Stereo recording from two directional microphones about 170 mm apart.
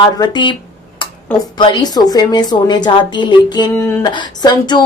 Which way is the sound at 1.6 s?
25° left (ahead or behind).